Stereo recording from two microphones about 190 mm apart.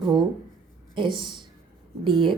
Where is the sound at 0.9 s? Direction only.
25° right (ahead or behind).